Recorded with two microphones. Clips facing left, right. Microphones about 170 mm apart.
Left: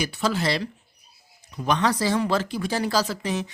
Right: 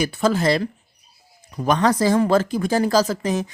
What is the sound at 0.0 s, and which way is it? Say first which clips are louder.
Speech: right 6 dB; 50° right (ahead or behind).